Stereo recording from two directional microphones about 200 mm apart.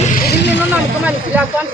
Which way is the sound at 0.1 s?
50° left (ahead or behind).